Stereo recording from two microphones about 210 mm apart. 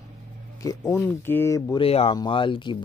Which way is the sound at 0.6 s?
15° left (ahead or behind).